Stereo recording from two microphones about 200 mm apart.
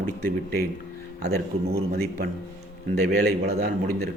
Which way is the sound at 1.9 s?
50° right (ahead or behind).